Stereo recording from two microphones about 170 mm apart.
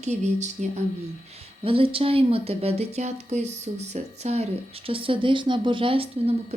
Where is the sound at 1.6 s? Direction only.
30° right (ahead or behind).